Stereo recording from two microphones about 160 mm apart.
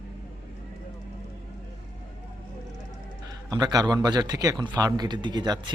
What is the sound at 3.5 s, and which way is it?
A man's voice, 25° right (ahead or behind).